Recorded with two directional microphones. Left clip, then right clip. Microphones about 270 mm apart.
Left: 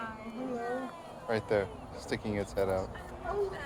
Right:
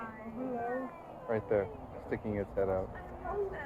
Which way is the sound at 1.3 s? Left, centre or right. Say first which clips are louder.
Left 1 dB; centre.